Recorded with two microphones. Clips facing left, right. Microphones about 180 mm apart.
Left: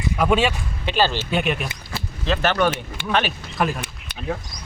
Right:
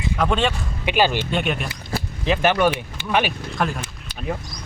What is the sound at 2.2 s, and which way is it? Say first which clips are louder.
Speech: right 2 dB; 15° right (ahead or behind).